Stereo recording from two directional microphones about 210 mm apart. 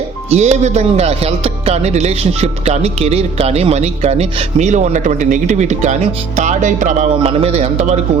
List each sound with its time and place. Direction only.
0.3 s speech: 30° right (ahead or behind)